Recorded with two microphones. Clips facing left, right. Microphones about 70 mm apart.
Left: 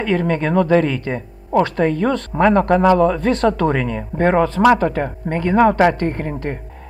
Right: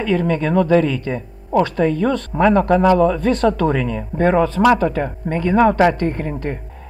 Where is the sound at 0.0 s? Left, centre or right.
Left.